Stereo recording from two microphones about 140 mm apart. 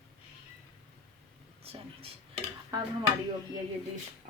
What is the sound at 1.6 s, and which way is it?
Speech, 45° right (ahead or behind).